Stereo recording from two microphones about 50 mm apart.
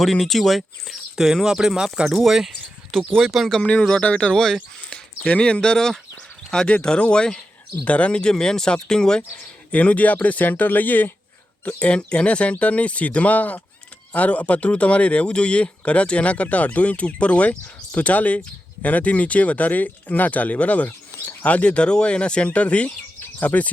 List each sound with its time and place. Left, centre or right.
0.0 s speech: centre
4.0 s speech: left
4.9 s a sound: centre
5.3 s speech: centre
9.4 s speech: left
11.8 s speech: left